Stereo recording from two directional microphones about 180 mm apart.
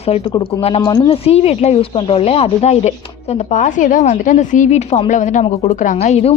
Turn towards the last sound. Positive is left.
turn(degrees=35)  # may be behind; listen again after turning